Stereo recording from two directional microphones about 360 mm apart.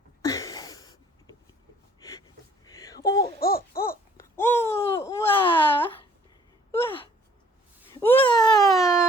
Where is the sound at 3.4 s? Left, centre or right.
Left.